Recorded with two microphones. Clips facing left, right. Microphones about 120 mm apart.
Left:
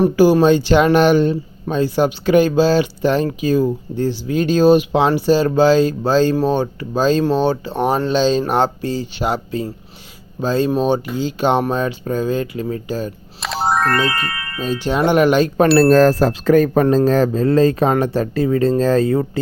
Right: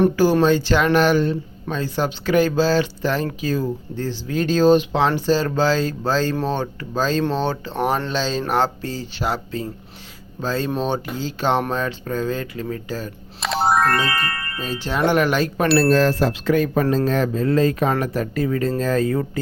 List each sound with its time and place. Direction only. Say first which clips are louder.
0.2 s speech: left 4 dB; 15° left (ahead or behind)
13.4 s music: even; centre (ahead or behind)
14.0 s speech: left 3 dB; 15° left (ahead or behind)
15.9 s speech: left 5 dB; 45° left (ahead or behind)